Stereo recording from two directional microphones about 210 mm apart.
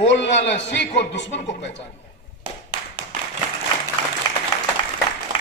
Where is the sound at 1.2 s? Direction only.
35° left (ahead or behind).